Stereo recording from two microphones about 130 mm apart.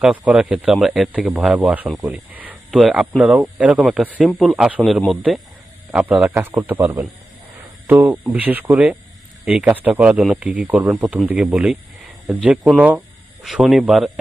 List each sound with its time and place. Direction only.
0.0 s speech: 5° right (ahead or behind)
6.7 s speech: 15° right (ahead or behind); by 14.1 s centre (ahead or behind)